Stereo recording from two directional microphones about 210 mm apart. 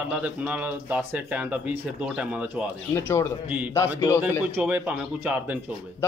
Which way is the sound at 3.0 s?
15° left (ahead or behind).